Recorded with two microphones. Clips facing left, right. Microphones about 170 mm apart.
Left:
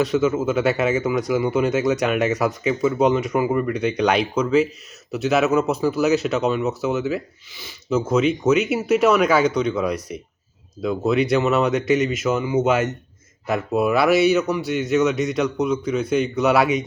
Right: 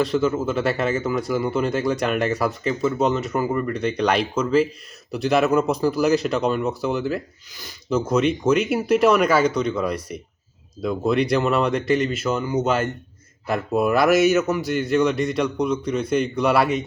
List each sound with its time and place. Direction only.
0.0 s speech: 5° left (ahead or behind)
13.9 s speech: 40° right (ahead or behind)
14.7 s speech: 5° left (ahead or behind)